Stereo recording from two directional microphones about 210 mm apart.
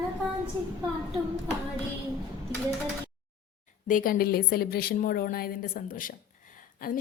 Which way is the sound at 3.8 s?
40° left (ahead or behind).